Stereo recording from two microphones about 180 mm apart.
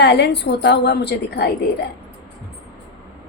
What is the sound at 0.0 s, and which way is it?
A woman's voice, 70° left (ahead or behind).